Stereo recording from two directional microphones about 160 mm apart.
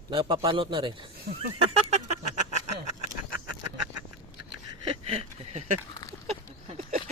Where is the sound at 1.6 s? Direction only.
40° right (ahead or behind).